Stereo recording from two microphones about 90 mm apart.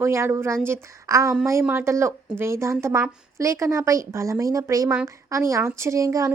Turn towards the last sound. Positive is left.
turn(degrees=-35)  # may be behind; listen again after turning